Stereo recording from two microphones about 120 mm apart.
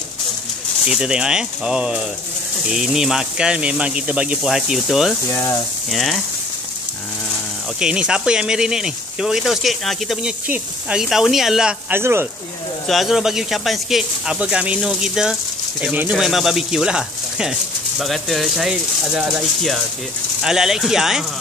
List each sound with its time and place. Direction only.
0.8 s speech: 5° right (ahead or behind)
5.3 s speech: 25° left (ahead or behind)
5.9 s speech: centre (ahead or behind)
7.8 s speech: 10° right (ahead or behind)
11.9 s speech: 20° right (ahead or behind)
12.8 s speech: centre (ahead or behind)